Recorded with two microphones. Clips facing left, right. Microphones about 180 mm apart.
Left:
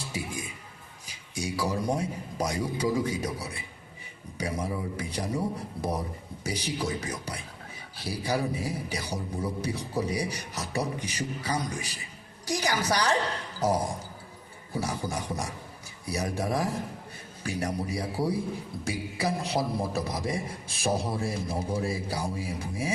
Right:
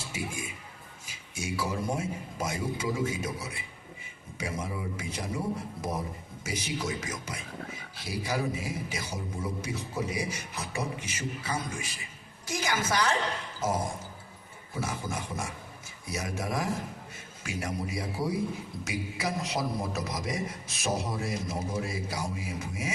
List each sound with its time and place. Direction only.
1.0 s a man's voice: 35° left (ahead or behind)
6.4 s a man's voice: 35° left (ahead or behind)